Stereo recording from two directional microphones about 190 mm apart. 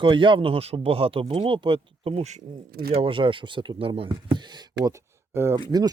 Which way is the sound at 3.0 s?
25° right (ahead or behind).